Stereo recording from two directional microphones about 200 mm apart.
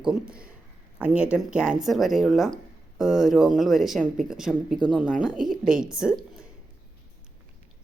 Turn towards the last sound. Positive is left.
turn(degrees=-5)  # may be behind; listen again after turning